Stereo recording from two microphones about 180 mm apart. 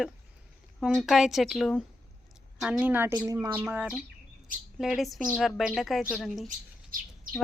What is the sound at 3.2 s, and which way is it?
Speech, 20° right (ahead or behind).